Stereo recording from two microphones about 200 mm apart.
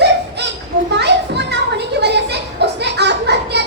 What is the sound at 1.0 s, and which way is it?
Children playing, 55° right (ahead or behind).